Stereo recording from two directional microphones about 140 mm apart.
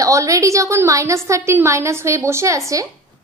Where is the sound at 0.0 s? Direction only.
25° right (ahead or behind).